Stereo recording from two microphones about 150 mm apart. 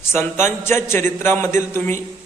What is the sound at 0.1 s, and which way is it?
A man's voice, 15° left (ahead or behind).